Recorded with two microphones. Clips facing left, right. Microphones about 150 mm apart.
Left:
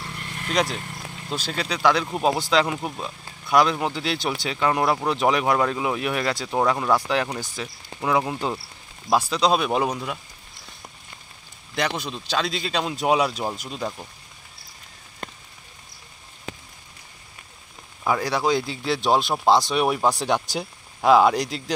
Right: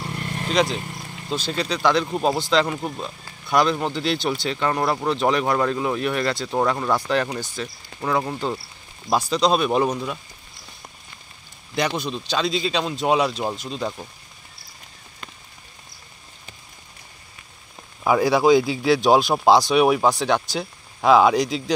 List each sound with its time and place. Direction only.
0.5 s a man's voice: 10° left (ahead or behind)
11.7 s a man's voice: centre (ahead or behind)
15.2 s rain on surface: 55° left (ahead or behind)
18.0 s speech: 10° right (ahead or behind)
20.1 s a man's voice: 10° left (ahead or behind)